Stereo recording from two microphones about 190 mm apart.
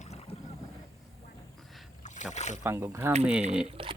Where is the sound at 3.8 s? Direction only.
30° right (ahead or behind).